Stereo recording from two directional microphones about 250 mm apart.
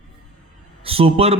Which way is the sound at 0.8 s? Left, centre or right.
Right.